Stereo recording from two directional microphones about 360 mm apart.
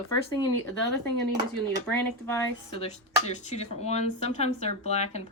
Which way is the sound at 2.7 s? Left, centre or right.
Centre.